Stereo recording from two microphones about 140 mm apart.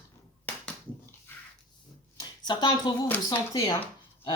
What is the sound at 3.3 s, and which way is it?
Speech, 25° left (ahead or behind).